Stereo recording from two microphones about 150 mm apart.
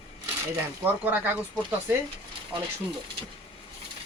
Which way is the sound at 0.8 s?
10° right (ahead or behind).